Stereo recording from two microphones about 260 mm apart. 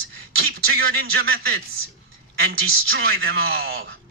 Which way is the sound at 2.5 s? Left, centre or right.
Right.